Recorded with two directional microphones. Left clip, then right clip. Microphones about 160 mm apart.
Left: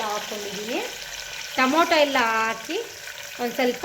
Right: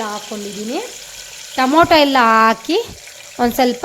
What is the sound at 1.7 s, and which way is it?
Speech, 75° right (ahead or behind).